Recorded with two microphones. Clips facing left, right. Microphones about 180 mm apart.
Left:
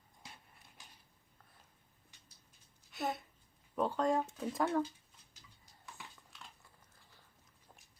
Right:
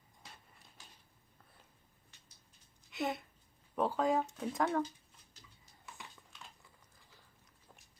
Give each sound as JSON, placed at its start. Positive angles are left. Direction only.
{"t": 2.9, "sound": "speech", "side_deg": -20}
{"t": 3.8, "sound": "speech", "side_deg": 0}